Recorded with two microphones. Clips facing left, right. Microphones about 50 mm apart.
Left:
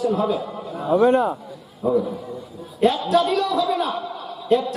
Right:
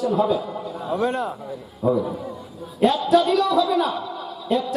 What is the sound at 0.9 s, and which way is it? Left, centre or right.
Speech, left.